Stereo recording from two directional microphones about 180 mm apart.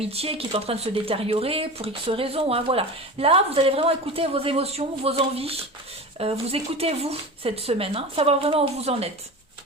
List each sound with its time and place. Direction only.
0.0 s speech: 35° right (ahead or behind)